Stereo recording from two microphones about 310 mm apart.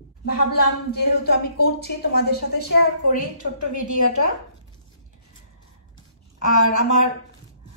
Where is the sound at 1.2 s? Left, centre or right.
Left.